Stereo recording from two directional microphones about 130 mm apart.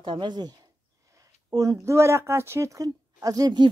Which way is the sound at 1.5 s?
25° right (ahead or behind).